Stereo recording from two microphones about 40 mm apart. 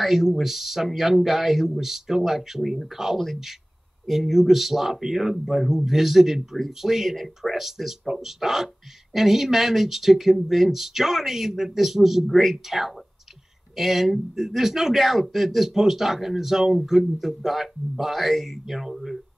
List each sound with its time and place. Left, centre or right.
0.0 s speech: centre